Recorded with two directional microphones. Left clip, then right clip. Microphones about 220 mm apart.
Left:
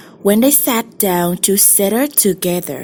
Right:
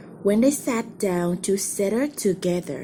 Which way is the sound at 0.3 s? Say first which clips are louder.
Left 7 dB; 40° left (ahead or behind).